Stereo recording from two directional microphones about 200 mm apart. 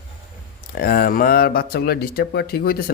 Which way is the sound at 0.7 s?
50° left (ahead or behind).